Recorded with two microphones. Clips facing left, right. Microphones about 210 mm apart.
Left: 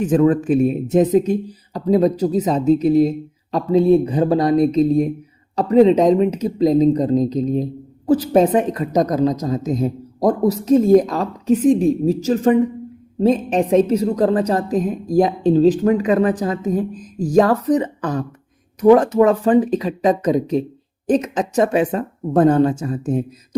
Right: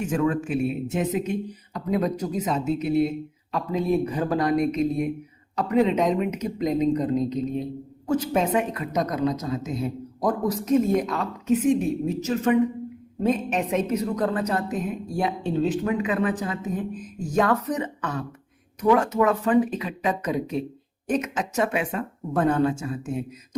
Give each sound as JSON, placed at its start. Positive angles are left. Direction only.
{"t": 0.0, "sound": "speech", "side_deg": 35}